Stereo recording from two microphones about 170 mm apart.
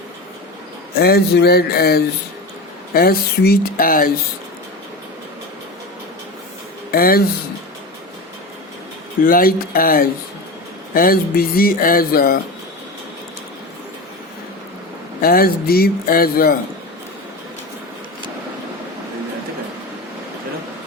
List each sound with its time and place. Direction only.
0.9 s a sound: 65° left (ahead or behind)
2.9 s speech: 60° left (ahead or behind)
6.9 s speech: 60° left (ahead or behind)
9.2 s speech: 60° left (ahead or behind)
15.2 s speech: 60° left (ahead or behind)